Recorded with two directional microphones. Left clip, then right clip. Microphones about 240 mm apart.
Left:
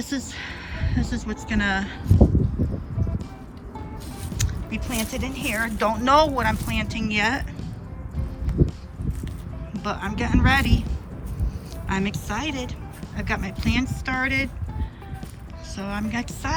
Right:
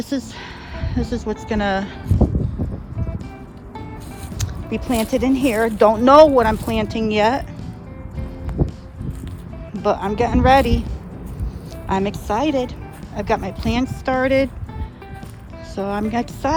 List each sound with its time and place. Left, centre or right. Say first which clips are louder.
0.0 s speech: right 4 dB; centre
4.4 s speech: right 5 dB; centre
9.8 s speech: right 10 dB; centre
11.9 s speech: right 7 dB; centre
15.7 s speech: right 7 dB; centre